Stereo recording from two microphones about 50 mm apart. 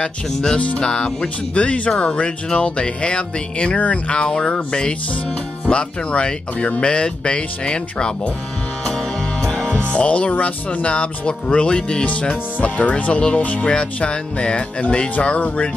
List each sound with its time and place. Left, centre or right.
0.0 s speech: centre
0.6 s speech: left
0.8 s speech: centre
5.7 s speech: left
8.8 s music: centre
9.8 s speech: left
12.1 s speech: left